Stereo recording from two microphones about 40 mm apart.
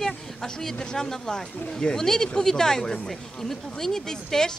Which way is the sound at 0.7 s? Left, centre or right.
Centre.